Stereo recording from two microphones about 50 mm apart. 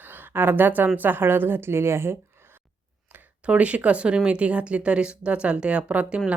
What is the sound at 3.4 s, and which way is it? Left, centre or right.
Speech, right.